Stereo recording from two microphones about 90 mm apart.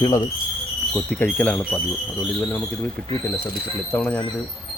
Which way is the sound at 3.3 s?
20° left (ahead or behind).